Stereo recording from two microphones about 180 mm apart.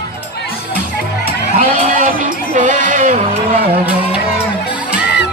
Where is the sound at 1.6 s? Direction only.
45° right (ahead or behind).